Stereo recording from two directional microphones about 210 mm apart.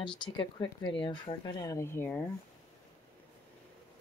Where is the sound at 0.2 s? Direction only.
20° left (ahead or behind).